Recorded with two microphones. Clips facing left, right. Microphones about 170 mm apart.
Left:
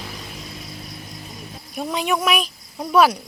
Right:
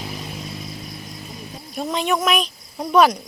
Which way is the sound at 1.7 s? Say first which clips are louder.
Right 1 dB; 5° left (ahead or behind).